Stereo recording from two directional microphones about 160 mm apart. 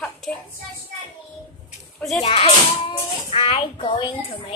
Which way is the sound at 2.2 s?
35° left (ahead or behind).